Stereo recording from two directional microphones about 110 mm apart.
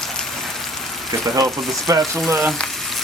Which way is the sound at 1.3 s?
30° right (ahead or behind).